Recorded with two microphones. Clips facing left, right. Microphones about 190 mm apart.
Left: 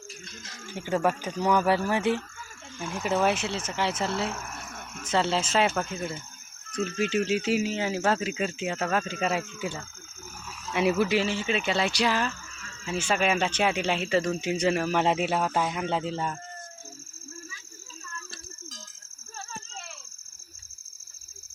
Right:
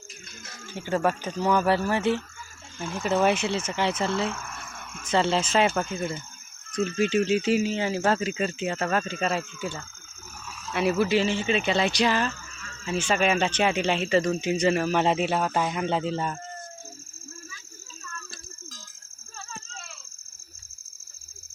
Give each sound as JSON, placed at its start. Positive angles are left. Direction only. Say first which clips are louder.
{"t": 0.7, "sound": "speech", "louder": "right 1 dB", "side_deg": 10}
{"t": 4.4, "sound": "a sound", "louder": "even", "side_deg": 20}
{"t": 4.7, "sound": "dog", "louder": "left 1 dB", "side_deg": 40}
{"t": 5.0, "sound": "speech", "louder": "right 2 dB", "side_deg": 5}